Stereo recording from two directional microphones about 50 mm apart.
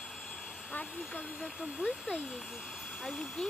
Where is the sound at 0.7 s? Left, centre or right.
Left.